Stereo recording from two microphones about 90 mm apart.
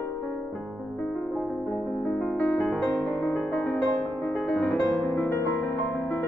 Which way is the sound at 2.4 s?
15° left (ahead or behind).